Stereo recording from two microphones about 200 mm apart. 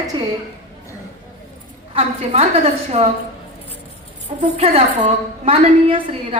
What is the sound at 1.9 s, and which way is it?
A woman's voice, 30° right (ahead or behind).